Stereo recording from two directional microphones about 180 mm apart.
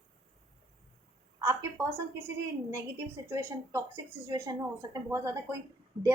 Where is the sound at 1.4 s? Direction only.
15° right (ahead or behind).